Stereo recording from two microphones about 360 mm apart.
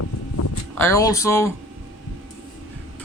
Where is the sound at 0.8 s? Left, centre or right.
Centre.